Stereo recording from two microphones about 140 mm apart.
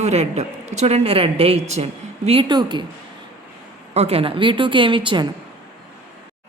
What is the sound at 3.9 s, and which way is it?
A woman's voice, 45° right (ahead or behind).